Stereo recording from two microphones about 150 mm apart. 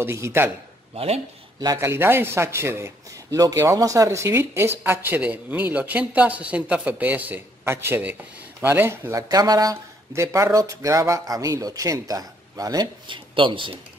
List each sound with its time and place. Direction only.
0.0 s a man's voice: 15° right (ahead or behind)
0.9 s speech: 45° right (ahead or behind)
1.6 s a man's voice: 20° right (ahead or behind)